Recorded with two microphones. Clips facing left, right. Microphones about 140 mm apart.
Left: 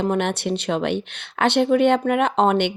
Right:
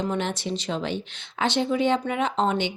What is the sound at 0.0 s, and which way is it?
Speech, 60° left (ahead or behind).